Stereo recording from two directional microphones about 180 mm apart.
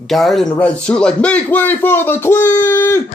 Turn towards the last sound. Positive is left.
turn(degrees=15)  # may be behind; listen again after turning